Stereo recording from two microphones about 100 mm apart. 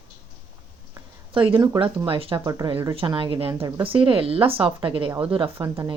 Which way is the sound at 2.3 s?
40° right (ahead or behind).